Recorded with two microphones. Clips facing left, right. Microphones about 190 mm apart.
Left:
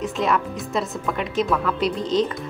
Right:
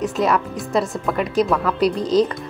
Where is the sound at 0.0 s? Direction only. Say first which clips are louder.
Right 3 dB; 40° right (ahead or behind).